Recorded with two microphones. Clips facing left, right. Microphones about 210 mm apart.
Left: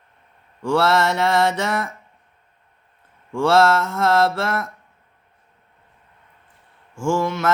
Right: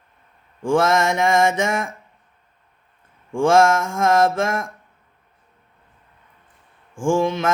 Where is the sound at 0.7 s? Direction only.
15° right (ahead or behind).